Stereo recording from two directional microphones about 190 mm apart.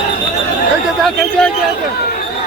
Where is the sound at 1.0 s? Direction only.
5° left (ahead or behind).